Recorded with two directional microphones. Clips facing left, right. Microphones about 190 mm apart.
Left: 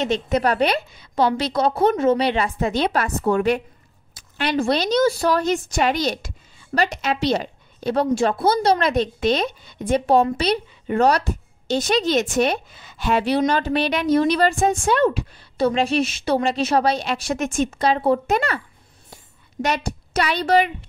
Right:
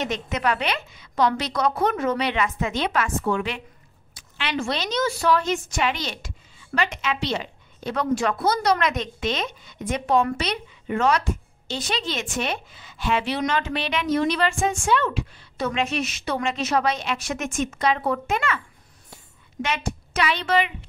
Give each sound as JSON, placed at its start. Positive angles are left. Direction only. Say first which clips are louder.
{"t": 0.0, "sound": "a woman's voice", "louder": "left 5 dB", "side_deg": 30}
{"t": 19.6, "sound": "a woman's voice", "louder": "left 4 dB", "side_deg": 40}